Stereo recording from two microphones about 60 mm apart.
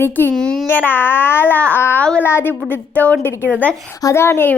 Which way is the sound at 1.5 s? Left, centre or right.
Left.